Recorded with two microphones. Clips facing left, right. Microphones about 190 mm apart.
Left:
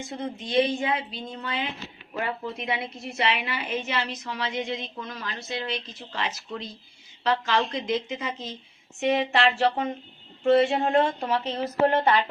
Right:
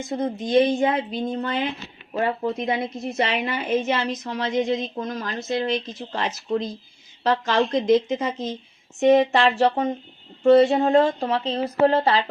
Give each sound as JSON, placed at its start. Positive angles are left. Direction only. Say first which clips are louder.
{"t": 0.1, "sound": "a woman's voice", "louder": "right 9 dB", "side_deg": -45}